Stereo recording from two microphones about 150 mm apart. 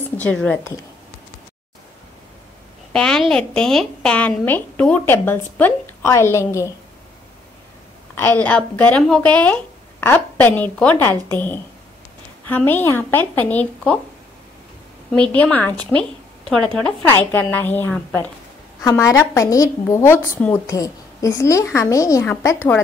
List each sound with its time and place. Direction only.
0.2 s a woman's voice: 10° left (ahead or behind)
2.9 s a woman's voice: 5° left (ahead or behind)
8.2 s a woman's voice: 10° left (ahead or behind)
15.1 s a woman's voice: 5° left (ahead or behind)